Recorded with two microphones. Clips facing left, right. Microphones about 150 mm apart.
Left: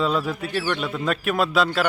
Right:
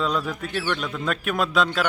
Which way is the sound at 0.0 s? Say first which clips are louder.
Left 2 dB; 5° left (ahead or behind).